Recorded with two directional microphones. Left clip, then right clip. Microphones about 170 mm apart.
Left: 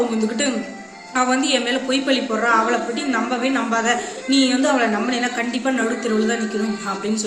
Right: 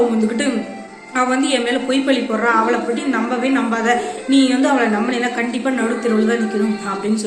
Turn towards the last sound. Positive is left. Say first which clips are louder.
# right 3 dB
turn(degrees=15)  # may be behind; listen again after turning